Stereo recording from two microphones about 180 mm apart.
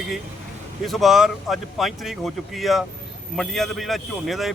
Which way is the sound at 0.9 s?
Centre (ahead or behind).